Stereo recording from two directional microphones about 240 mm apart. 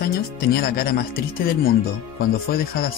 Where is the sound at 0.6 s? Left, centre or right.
Left.